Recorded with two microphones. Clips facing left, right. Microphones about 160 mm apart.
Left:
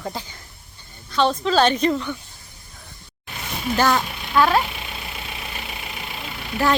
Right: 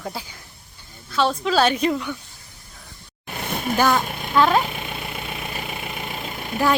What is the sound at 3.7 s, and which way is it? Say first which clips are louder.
Speech: even; 10° right (ahead or behind).